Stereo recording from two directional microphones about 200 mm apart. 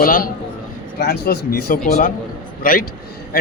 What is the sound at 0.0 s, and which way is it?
Speech, 45° left (ahead or behind).